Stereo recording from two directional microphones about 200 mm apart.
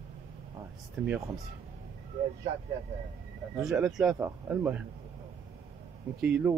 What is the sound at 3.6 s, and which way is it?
Speech, centre (ahead or behind).